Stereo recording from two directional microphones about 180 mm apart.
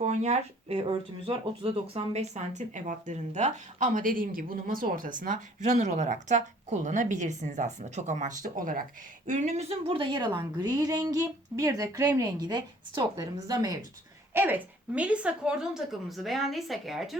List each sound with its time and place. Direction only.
0.0 s a woman's voice: 40° right (ahead or behind); by 17.2 s centre (ahead or behind)